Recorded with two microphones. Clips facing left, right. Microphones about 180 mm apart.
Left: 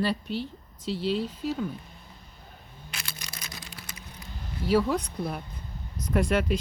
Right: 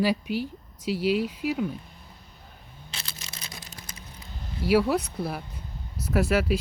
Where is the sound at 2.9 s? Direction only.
25° right (ahead or behind).